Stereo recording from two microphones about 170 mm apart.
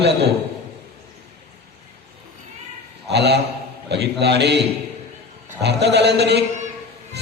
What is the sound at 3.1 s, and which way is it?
A man's voice, 80° right.